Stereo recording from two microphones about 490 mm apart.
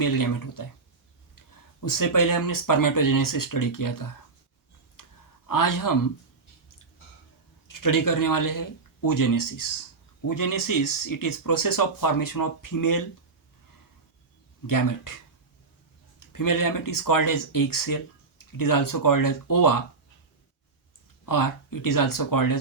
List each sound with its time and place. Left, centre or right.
0.0 s speech: left
1.8 s speech: left
5.0 s clicking: left
5.5 s speech: left
7.7 s speech: left
14.7 s speech: left
16.2 s speech: left
21.2 s speech: left